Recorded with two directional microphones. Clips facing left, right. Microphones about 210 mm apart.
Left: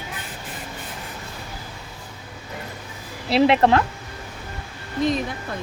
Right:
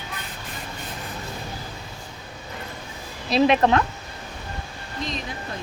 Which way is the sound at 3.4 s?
25° left (ahead or behind).